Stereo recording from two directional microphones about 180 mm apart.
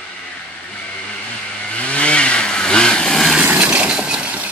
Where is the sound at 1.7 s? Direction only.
5° left (ahead or behind).